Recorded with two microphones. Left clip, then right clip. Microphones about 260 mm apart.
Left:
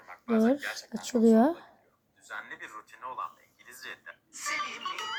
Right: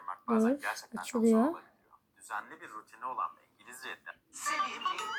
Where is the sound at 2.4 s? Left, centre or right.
Centre.